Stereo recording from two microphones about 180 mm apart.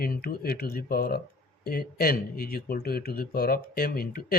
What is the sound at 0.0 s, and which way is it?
Speech, 55° left (ahead or behind).